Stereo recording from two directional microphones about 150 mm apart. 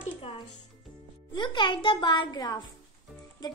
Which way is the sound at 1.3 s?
30° left (ahead or behind).